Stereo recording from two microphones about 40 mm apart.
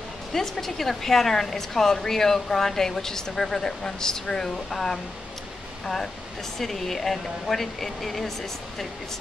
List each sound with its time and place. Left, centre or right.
0.3 s speech: centre
6.6 s speech: centre